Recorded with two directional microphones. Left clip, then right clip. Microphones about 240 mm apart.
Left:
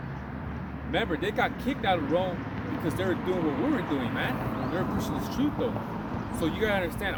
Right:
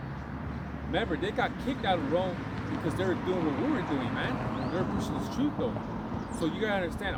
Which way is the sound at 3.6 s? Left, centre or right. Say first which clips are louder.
Left 2 dB; centre.